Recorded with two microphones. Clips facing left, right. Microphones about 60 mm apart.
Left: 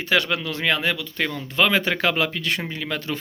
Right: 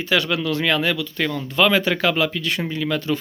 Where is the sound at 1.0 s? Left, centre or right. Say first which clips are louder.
Right 3 dB; left.